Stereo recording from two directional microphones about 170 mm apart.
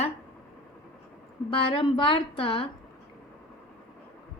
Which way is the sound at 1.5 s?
30° left (ahead or behind).